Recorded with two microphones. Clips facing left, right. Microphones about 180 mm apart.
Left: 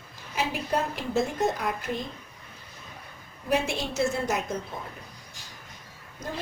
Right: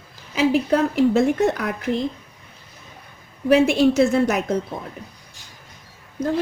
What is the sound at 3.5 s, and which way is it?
Speech, 75° right (ahead or behind).